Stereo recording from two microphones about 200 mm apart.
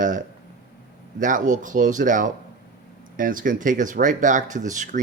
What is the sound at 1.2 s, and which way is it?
Speech, 40° right (ahead or behind).